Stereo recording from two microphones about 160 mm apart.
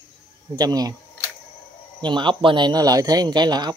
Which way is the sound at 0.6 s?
25° right (ahead or behind).